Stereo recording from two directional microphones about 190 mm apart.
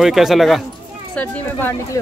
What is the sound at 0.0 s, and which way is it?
A man's voice, centre (ahead or behind).